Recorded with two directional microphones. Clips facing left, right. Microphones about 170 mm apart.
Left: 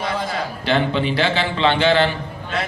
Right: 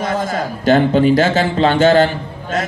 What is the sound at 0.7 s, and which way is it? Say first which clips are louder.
A man's voice: right 8 dB; 45° right (ahead or behind).